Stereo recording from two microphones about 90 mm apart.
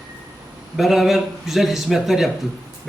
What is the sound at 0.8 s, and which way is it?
A man's voice, 5° right (ahead or behind).